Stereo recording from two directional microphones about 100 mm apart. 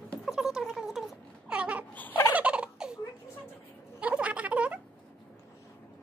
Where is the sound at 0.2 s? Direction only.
5° right (ahead or behind).